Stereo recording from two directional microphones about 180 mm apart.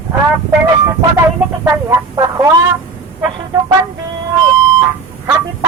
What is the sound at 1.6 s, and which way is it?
Speech, 20° right (ahead or behind).